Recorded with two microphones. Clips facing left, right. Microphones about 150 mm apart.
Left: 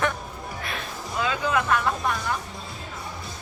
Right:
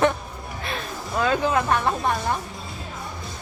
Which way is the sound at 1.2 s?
50° right (ahead or behind).